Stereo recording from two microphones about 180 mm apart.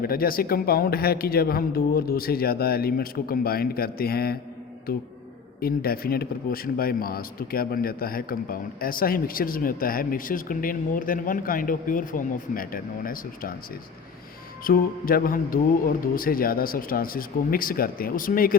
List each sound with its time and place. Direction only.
0.0 s speech: 55° left (ahead or behind)
5.5 s speech: 55° left (ahead or behind)
14.6 s speech: 55° left (ahead or behind)